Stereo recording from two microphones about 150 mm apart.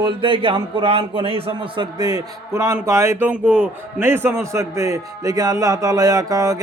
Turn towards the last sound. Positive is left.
turn(degrees=-25)  # may be behind; listen again after turning